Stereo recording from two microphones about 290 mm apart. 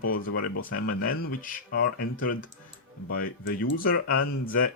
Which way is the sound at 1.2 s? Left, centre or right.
Left.